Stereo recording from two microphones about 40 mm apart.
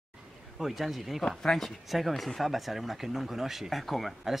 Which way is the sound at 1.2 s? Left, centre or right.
Centre.